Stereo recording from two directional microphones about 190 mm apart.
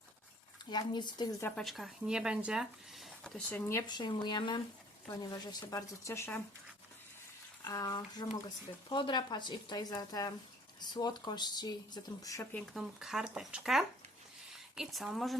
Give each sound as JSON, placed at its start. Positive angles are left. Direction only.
{"t": 0.6, "sound": "speech", "side_deg": 20}
{"t": 1.5, "sound": "speech", "side_deg": 0}
{"t": 7.6, "sound": "speech", "side_deg": 15}
{"t": 12.5, "sound": "speech", "side_deg": 0}